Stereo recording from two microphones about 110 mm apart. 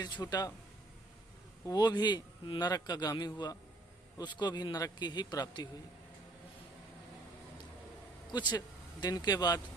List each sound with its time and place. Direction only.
0.0 s a man's voice: 40° left (ahead or behind)
1.6 s a man's voice: 40° left (ahead or behind)
8.3 s speech: 40° left (ahead or behind)